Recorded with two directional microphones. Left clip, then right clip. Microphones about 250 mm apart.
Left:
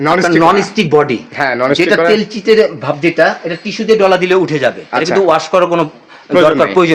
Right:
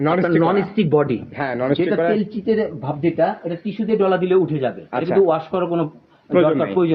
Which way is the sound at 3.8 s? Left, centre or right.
Left.